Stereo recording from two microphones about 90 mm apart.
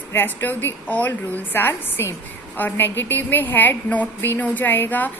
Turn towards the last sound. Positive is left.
turn(degrees=20)  # may be behind; listen again after turning